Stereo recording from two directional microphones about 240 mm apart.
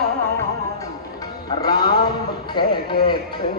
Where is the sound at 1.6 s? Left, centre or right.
Centre.